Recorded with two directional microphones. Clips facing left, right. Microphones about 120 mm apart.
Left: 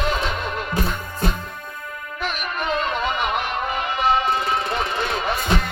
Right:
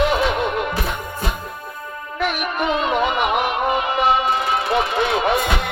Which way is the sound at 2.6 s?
65° right (ahead or behind).